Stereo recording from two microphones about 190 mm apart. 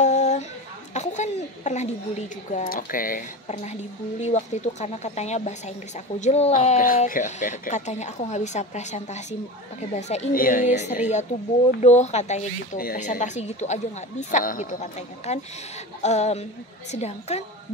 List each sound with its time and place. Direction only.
0.0 s a sound: 35° left (ahead or behind)
0.9 s speech: 40° left (ahead or behind)
10.3 s speech: 45° left (ahead or behind)
12.7 s speech: 45° left (ahead or behind)